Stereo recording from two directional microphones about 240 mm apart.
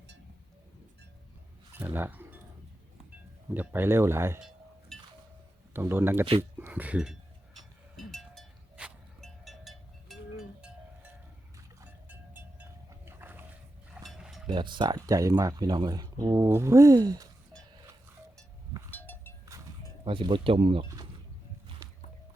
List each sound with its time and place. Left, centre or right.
1.7 s chink: centre
3.5 s speech: centre
4.9 s wind chime: centre
5.7 s speech: centre
7.9 s a sound: centre
14.4 s speech: centre
18.9 s goat: centre
20.1 s speech: right